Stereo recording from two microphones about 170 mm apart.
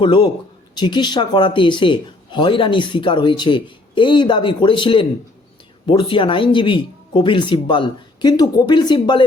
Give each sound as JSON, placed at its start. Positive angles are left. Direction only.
{"t": 0.0, "sound": "speech", "side_deg": 30}